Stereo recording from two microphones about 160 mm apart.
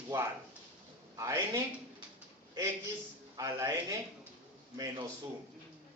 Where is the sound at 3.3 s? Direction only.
20° right (ahead or behind).